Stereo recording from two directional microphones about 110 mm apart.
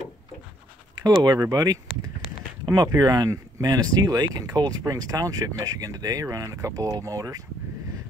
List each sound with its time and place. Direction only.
1.0 s speech: 35° right (ahead or behind)